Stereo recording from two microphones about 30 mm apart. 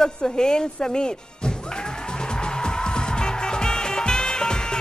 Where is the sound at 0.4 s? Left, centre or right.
Left.